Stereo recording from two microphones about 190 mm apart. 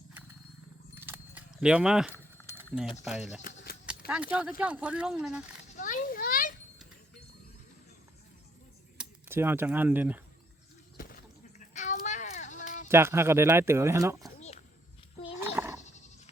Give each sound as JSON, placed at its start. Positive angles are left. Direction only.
{"t": 0.9, "sound": "keys jangling", "side_deg": -10}
{"t": 2.1, "sound": "keys jangling", "side_deg": 10}
{"t": 2.7, "sound": "speech", "side_deg": 0}
{"t": 5.7, "sound": "children playing", "side_deg": 45}
{"t": 9.0, "sound": "speech", "side_deg": -10}
{"t": 10.9, "sound": "a sound", "side_deg": 50}
{"t": 12.9, "sound": "speech", "side_deg": -15}
{"t": 14.3, "sound": "a sound", "side_deg": 35}
{"t": 15.4, "sound": "goat", "side_deg": -10}
{"t": 15.8, "sound": "goat", "side_deg": 40}